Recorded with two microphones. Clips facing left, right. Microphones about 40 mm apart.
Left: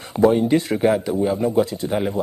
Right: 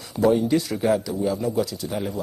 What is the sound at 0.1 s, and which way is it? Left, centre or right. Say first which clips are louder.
A man's voice: left 3 dB; left.